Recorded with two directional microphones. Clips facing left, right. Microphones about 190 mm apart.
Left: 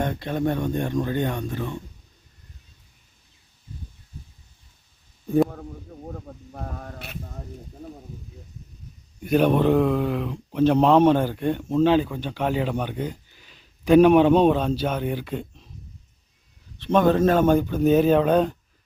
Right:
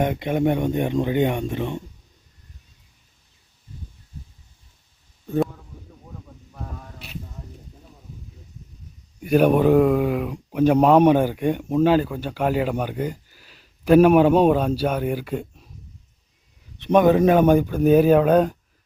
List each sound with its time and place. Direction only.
0.0 s speech: 20° right (ahead or behind)
6.1 s a sound: 55° left (ahead or behind)
9.2 s speech: 10° right (ahead or behind)
16.8 s speech: 15° right (ahead or behind)